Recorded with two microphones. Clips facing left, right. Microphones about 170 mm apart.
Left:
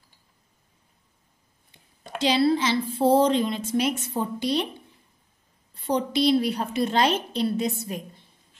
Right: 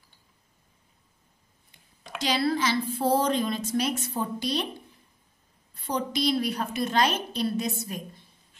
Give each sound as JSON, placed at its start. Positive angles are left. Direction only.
{"t": 2.1, "sound": "a woman's voice", "side_deg": 25}
{"t": 5.9, "sound": "a woman's voice", "side_deg": 25}